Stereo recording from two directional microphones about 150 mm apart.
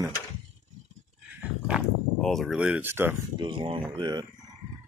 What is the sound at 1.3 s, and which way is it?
Horse, 10° right (ahead or behind).